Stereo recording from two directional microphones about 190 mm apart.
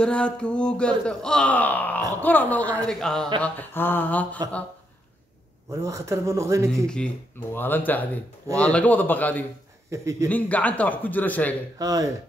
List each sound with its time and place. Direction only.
0.0 s a man's voice: 5° left (ahead or behind)
5.7 s a man's voice: 15° right (ahead or behind)
7.5 s a man's voice: 10° left (ahead or behind)
9.8 s a man's voice: 15° right (ahead or behind)
10.3 s a man's voice: 10° left (ahead or behind)
11.8 s a man's voice: 15° right (ahead or behind)